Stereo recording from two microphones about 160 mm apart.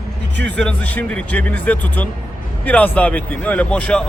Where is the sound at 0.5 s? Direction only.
10° left (ahead or behind).